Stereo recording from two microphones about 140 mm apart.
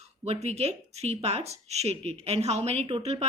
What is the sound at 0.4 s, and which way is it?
A woman's voice, 50° right (ahead or behind).